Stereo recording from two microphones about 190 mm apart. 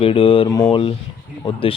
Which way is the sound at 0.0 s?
30° left (ahead or behind).